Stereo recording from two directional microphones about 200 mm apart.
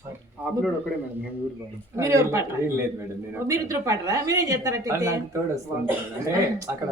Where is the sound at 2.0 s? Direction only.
15° right (ahead or behind).